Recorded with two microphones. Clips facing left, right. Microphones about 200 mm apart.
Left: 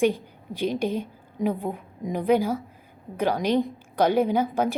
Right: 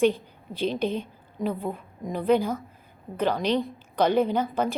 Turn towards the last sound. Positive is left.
turn(degrees=10)  # may be behind; listen again after turning